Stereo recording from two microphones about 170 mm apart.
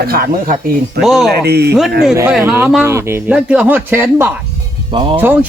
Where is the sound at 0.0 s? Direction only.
60° right (ahead or behind).